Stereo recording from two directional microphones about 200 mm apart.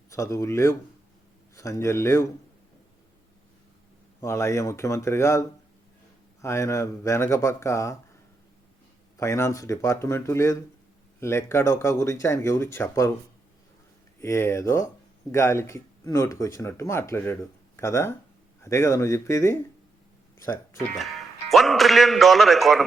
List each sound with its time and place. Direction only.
0.1 s speech: 15° left (ahead or behind)
4.2 s speech: 15° left (ahead or behind)
9.1 s speech: 15° left (ahead or behind)
14.2 s speech: 15° left (ahead or behind)
21.0 s a man's voice: centre (ahead or behind)